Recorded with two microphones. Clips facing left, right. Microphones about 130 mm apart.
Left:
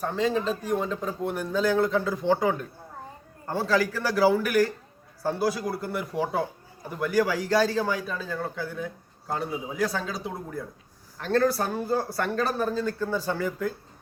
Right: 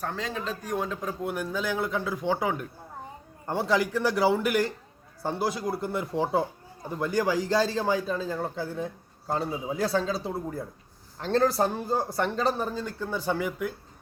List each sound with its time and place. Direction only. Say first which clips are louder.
0.0 s speech: left 7 dB; 5° left (ahead or behind)
3.4 s a man's voice: left 1 dB; 20° right (ahead or behind)